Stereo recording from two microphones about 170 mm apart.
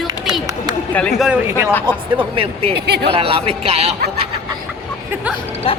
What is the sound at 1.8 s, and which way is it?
Speech, 30° right (ahead or behind).